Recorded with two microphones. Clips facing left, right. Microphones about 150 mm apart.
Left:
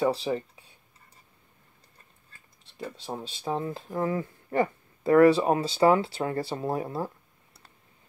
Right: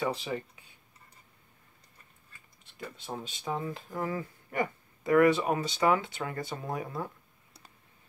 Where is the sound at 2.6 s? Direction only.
30° left (ahead or behind).